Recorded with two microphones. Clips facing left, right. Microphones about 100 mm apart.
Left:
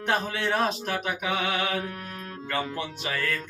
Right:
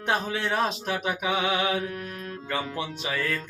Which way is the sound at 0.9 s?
20° right (ahead or behind).